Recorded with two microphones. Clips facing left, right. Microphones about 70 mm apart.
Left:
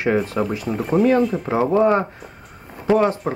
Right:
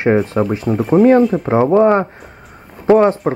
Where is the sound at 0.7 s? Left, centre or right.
Centre.